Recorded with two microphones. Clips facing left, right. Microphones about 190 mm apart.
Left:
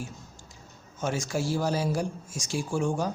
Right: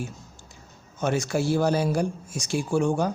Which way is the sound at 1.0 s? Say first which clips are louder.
Right 5 dB; 65° right (ahead or behind).